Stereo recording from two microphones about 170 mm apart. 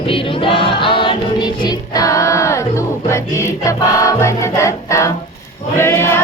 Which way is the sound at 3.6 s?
20° left (ahead or behind).